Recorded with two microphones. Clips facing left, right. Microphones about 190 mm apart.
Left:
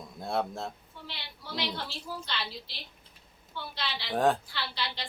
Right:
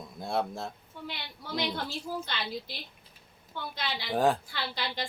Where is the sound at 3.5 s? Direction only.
45° right (ahead or behind).